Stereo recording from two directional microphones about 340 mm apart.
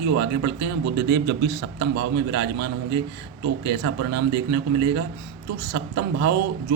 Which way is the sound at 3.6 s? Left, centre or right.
Right.